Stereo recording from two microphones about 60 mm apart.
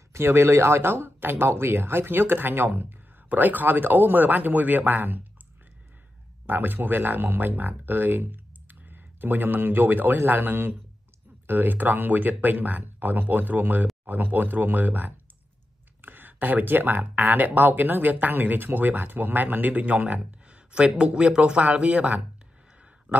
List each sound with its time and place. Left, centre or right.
0.1 s speech: right
6.4 s speech: right
23.1 s a sound: right